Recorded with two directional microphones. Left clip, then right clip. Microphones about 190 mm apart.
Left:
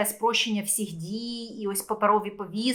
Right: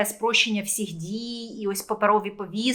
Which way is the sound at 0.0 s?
10° right (ahead or behind).